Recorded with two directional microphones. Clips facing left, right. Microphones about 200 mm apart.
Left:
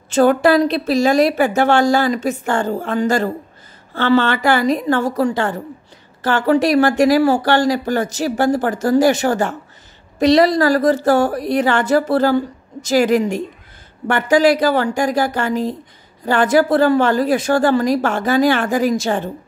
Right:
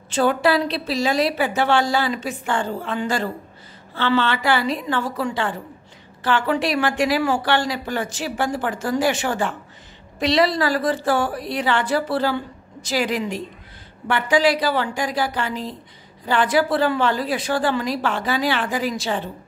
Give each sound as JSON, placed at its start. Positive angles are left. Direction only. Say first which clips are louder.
{"t": 0.1, "sound": "a woman's voice", "louder": "left 6 dB", "side_deg": 45}